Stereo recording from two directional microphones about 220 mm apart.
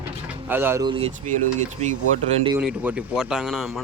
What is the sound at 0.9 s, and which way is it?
Speech, 25° right (ahead or behind).